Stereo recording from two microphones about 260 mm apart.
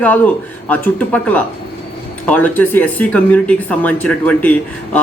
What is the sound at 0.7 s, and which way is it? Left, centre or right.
Speech, centre.